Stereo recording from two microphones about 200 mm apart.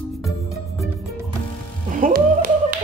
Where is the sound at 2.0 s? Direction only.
45° right (ahead or behind).